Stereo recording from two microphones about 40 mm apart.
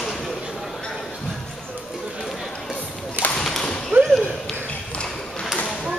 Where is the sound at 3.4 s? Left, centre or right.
Centre.